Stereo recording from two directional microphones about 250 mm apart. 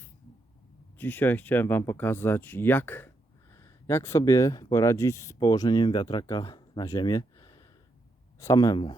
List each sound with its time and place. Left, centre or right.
0.9 s speech: centre